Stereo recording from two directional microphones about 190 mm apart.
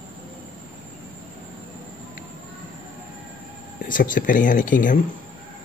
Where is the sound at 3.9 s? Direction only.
45° left (ahead or behind).